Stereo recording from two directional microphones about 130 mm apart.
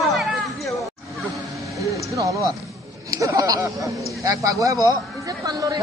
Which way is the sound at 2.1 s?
25° right (ahead or behind).